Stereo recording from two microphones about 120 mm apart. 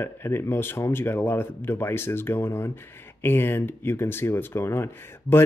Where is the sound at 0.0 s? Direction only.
20° left (ahead or behind).